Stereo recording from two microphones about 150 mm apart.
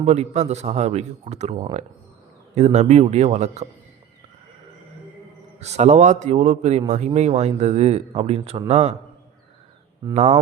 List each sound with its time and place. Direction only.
0.0 s a man's voice: 45° right (ahead or behind)
5.5 s a man's voice: 45° right (ahead or behind)